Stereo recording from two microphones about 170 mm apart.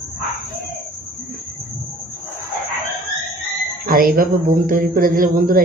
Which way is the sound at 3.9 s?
60° right (ahead or behind).